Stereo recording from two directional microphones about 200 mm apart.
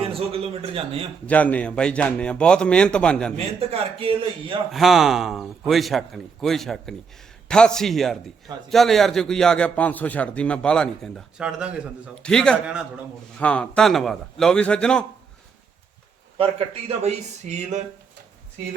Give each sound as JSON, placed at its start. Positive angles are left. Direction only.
{"t": 0.0, "sound": "a man's voice", "side_deg": -30}
{"t": 1.3, "sound": "a man's voice", "side_deg": 5}
{"t": 3.3, "sound": "a man's voice", "side_deg": -30}
{"t": 4.7, "sound": "a man's voice", "side_deg": 0}
{"t": 17.0, "sound": "a sound", "side_deg": -35}